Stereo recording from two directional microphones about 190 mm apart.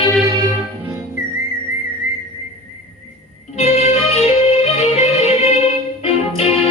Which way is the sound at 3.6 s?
35° left (ahead or behind).